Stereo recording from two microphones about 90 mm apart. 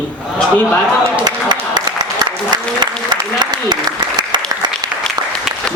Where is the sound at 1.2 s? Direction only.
55° right (ahead or behind).